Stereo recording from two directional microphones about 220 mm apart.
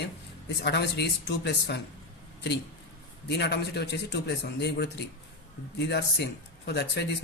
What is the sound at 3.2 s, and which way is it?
Speech, 50° left (ahead or behind).